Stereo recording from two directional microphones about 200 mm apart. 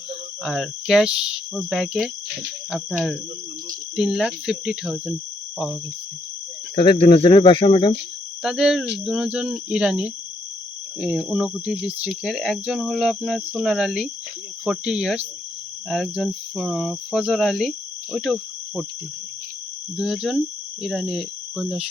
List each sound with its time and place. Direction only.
0.4 s speech: centre (ahead or behind)
3.9 s speech: centre (ahead or behind)
6.7 s speech: 25° left (ahead or behind)
8.4 s speech: centre (ahead or behind)
20.0 s speech: centre (ahead or behind)